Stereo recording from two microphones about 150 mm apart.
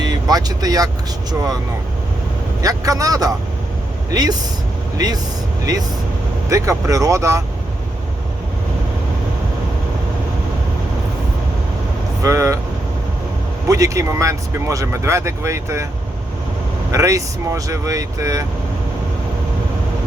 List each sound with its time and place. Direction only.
0.0 s speech: 25° right (ahead or behind)
2.6 s speech: 25° right (ahead or behind)
6.5 s speech: 20° right (ahead or behind)
12.2 s speech: 20° right (ahead or behind)
13.7 s speech: 20° right (ahead or behind)
16.9 s speech: 20° right (ahead or behind)